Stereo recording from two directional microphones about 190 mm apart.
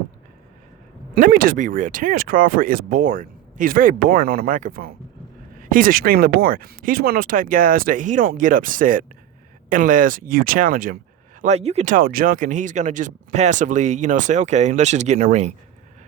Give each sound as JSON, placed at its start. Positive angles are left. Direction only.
{"t": 1.1, "sound": "speech", "side_deg": -50}
{"t": 11.4, "sound": "speech", "side_deg": -35}